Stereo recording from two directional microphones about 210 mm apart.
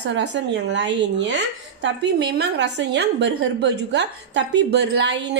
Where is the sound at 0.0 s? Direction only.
55° right (ahead or behind).